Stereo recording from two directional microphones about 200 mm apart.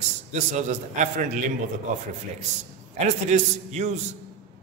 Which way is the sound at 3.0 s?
35° right (ahead or behind).